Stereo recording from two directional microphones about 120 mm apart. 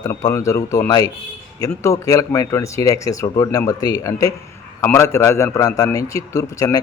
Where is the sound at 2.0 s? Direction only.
30° left (ahead or behind).